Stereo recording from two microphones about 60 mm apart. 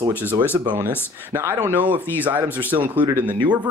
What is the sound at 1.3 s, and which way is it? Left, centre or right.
Speech, right.